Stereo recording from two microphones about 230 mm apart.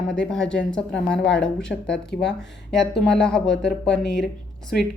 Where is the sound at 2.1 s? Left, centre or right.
Left.